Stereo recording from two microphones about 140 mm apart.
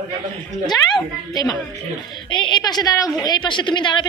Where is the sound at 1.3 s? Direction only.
30° left (ahead or behind).